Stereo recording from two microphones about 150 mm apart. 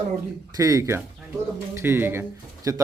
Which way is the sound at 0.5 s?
20° right (ahead or behind).